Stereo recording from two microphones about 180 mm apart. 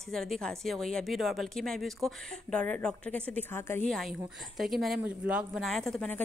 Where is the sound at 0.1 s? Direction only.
Centre (ahead or behind).